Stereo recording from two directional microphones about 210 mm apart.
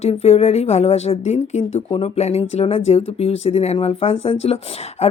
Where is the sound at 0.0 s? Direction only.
30° left (ahead or behind).